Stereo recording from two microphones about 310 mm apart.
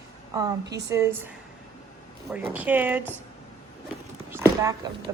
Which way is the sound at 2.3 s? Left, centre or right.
Centre.